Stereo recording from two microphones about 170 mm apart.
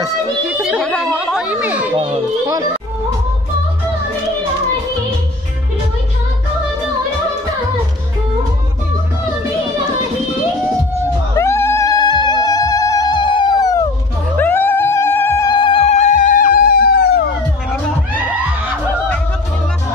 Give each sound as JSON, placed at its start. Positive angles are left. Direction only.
{"t": 0.5, "sound": "music", "side_deg": -5}
{"t": 0.8, "sound": "chatter", "side_deg": 5}
{"t": 2.0, "sound": "children playing", "side_deg": -30}
{"t": 11.3, "sound": "cat", "side_deg": 15}
{"t": 14.3, "sound": "music", "side_deg": 10}
{"t": 15.5, "sound": "cat", "side_deg": 30}